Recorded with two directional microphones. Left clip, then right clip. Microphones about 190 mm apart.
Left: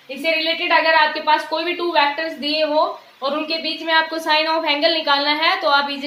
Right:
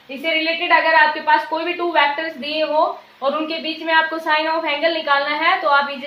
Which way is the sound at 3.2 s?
20° left (ahead or behind).